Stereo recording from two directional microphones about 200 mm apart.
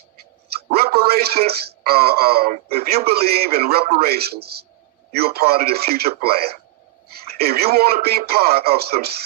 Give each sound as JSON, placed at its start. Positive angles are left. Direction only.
{"t": 0.7, "sound": "a man's voice", "side_deg": -50}